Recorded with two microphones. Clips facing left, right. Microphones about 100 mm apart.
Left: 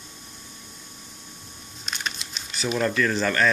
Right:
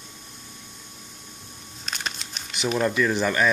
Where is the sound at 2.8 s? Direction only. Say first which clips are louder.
Right 1 dB; 15° right (ahead or behind).